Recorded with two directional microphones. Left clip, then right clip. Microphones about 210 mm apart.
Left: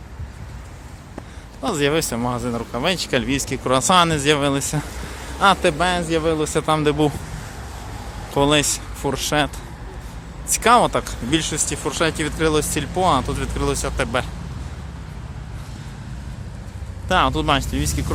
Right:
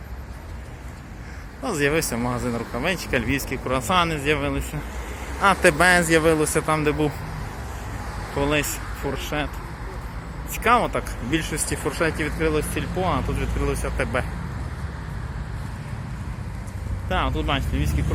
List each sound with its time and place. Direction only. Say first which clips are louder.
1.6 s speech: left 2 dB; 15° left (ahead or behind)
3.6 s speech: left 6 dB; 35° left (ahead or behind)
5.6 s a man's voice: right 3 dB; centre (ahead or behind)
6.7 s speech: left 4 dB; 20° left (ahead or behind)
8.4 s speech: left 6 dB; 35° left (ahead or behind)
10.6 s speech: left 5 dB; 30° left (ahead or behind)
11.0 s speech: left 4 dB; 20° left (ahead or behind)
12.1 s speech: left 4 dB; 30° left (ahead or behind)
17.1 s speech: left 7 dB; 40° left (ahead or behind)